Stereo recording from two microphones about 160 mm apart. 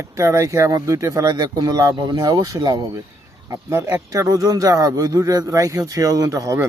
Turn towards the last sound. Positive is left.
turn(degrees=-20)  # may be behind; listen again after turning